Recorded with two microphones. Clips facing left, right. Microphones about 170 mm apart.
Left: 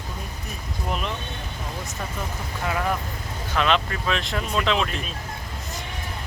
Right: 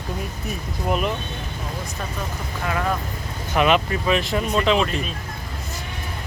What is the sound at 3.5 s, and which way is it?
Speech, 10° right (ahead or behind).